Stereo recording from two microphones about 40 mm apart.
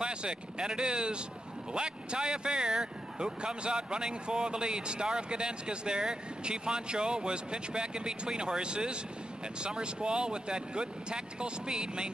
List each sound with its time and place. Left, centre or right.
0.0 s speech: right